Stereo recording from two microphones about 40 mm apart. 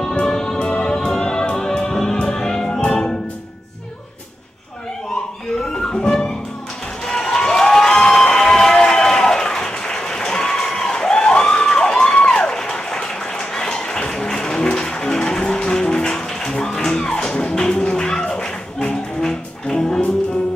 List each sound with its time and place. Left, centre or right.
0.2 s music: centre
5.6 s music: centre
7.1 s cheering: centre
12.3 s a sound: left
14.7 s music: centre